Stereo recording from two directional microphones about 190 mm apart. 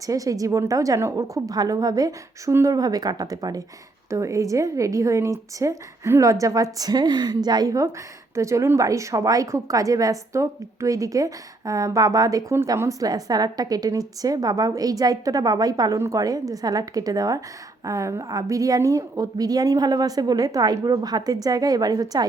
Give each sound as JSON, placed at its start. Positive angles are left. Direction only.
{"t": 0.0, "sound": "a woman's voice", "side_deg": -15}